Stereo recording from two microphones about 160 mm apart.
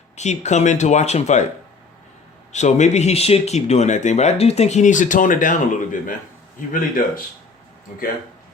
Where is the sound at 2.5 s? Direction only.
45° left (ahead or behind).